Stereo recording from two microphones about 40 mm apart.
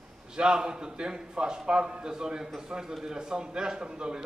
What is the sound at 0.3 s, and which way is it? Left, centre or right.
A man's voice, centre.